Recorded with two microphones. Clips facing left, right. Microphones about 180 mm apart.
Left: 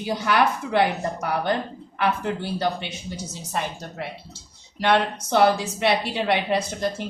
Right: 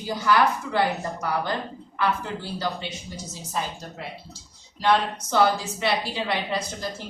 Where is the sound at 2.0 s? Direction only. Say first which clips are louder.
Left 2 dB; 60° left (ahead or behind).